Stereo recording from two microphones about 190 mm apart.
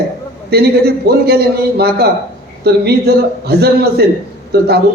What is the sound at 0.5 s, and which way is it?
A man's voice, 55° right (ahead or behind).